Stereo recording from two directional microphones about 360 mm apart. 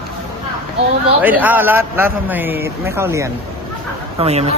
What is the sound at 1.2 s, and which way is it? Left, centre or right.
A man's voice, centre.